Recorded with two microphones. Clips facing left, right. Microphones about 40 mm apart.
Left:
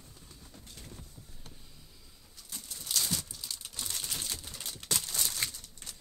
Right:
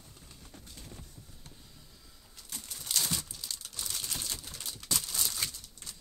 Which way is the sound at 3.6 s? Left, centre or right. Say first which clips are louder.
Left 1 dB; left.